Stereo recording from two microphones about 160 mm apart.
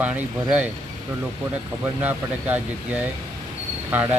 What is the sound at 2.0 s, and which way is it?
Speech, 10° right (ahead or behind).